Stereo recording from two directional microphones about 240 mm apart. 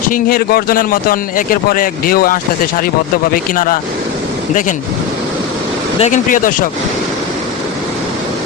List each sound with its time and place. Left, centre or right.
0.1 s speech: left
6.0 s speech: left